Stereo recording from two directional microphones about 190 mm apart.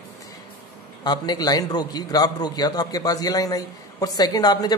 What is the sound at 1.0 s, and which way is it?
Speech, 20° left (ahead or behind).